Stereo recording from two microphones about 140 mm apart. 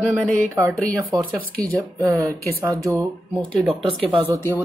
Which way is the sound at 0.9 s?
25° right (ahead or behind).